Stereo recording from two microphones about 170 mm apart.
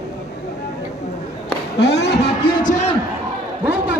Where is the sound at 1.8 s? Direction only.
75° left (ahead or behind).